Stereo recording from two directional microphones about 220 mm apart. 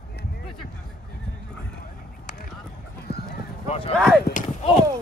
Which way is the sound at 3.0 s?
45° left (ahead or behind).